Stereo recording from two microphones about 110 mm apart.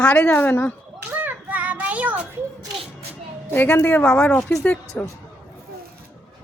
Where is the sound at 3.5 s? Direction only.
15° left (ahead or behind).